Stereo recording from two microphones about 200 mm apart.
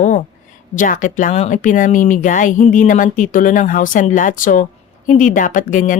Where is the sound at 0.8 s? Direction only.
40° left (ahead or behind).